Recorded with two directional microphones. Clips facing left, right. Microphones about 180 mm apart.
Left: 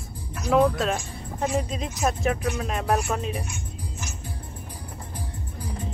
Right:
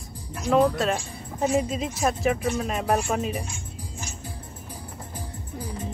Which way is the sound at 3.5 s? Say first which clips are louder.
Left 1 dB; 30° right (ahead or behind).